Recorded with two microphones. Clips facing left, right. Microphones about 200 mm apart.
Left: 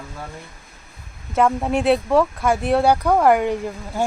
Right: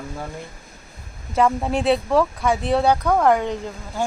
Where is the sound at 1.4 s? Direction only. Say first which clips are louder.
Left 1 dB; 5° left (ahead or behind).